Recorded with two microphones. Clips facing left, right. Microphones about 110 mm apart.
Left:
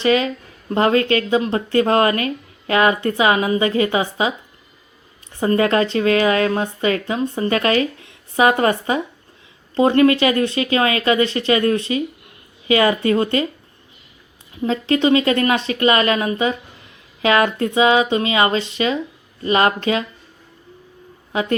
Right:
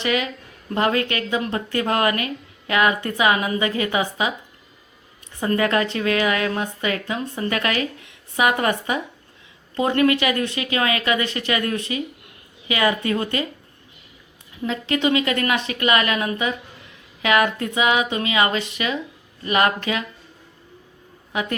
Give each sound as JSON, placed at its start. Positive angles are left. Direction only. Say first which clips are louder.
{"t": 0.0, "sound": "a woman's voice", "louder": "left 6 dB", "side_deg": 30}
{"t": 5.4, "sound": "a woman's voice", "louder": "left 4 dB", "side_deg": 30}
{"t": 14.6, "sound": "a woman's voice", "louder": "left 5 dB", "side_deg": 30}